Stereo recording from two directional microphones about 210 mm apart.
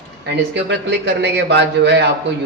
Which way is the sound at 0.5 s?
55° right (ahead or behind).